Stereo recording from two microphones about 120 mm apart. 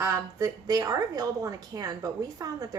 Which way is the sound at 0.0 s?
25° right (ahead or behind).